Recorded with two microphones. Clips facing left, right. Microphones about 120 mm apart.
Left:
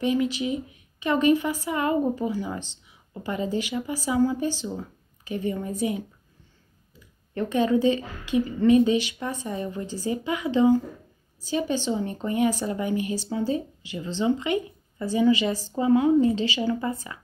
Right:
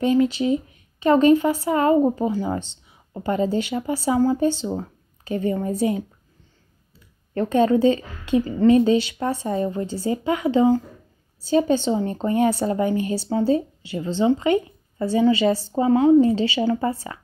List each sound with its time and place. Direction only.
0.0 s speech: 35° right (ahead or behind)
7.3 s speech: 35° right (ahead or behind)